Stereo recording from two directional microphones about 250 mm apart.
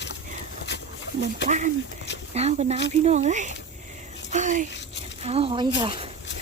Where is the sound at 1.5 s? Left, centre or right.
Right.